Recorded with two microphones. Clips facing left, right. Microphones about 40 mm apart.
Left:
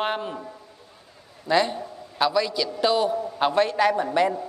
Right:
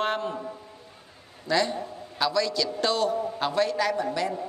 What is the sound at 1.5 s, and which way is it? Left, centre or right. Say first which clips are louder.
A man's voice: left 3 dB; left.